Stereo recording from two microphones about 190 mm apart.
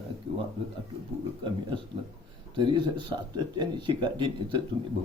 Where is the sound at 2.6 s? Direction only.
25° right (ahead or behind).